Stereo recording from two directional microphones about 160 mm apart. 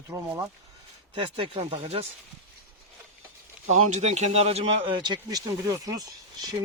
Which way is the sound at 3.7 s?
45° right (ahead or behind).